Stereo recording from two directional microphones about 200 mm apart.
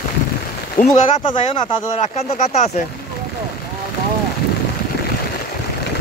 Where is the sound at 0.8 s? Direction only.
45° left (ahead or behind).